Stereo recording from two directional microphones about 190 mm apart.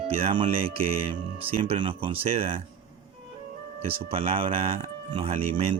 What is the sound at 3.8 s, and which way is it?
Music, 30° right (ahead or behind).